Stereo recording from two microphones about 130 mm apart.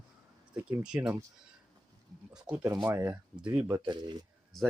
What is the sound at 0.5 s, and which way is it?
Speech, 10° right (ahead or behind).